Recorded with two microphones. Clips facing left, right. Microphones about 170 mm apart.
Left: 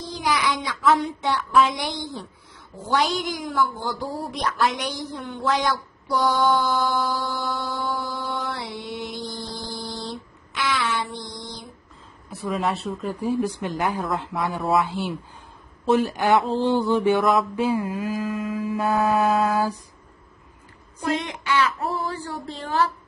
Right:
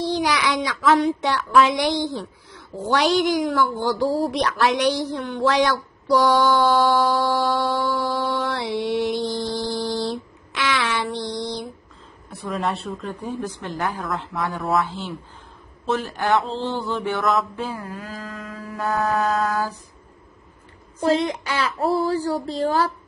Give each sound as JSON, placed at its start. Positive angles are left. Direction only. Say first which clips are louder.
{"t": 0.0, "sound": "child singing", "louder": "right 3 dB", "side_deg": -85}
{"t": 12.3, "sound": "a sound", "louder": "left 1 dB", "side_deg": 0}
{"t": 21.0, "sound": "child singing", "louder": "right 6 dB", "side_deg": -30}